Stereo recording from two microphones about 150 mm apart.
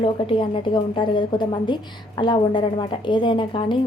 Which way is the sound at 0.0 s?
35° left (ahead or behind).